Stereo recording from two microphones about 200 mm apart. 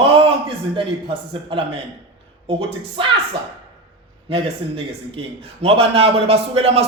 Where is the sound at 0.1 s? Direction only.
30° right (ahead or behind).